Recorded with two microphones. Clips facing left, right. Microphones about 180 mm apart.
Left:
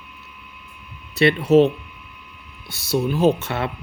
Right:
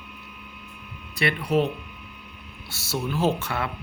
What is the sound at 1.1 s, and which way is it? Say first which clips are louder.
Speech: left 9 dB; 25° left (ahead or behind).